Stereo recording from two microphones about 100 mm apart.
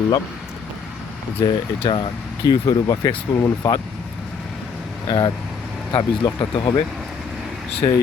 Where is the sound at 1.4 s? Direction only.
35° left (ahead or behind).